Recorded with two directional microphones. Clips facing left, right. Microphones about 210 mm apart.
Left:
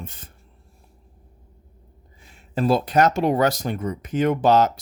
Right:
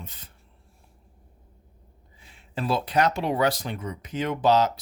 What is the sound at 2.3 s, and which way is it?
Speech, 45° left (ahead or behind).